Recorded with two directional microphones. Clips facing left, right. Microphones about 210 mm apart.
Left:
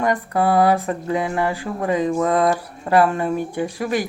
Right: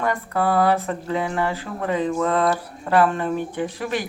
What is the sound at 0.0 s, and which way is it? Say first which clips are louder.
Speech: left 3 dB; 15° left (ahead or behind).